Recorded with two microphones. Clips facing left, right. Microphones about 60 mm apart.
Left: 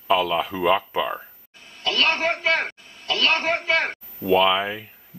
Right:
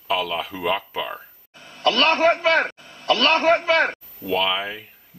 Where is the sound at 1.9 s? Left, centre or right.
Right.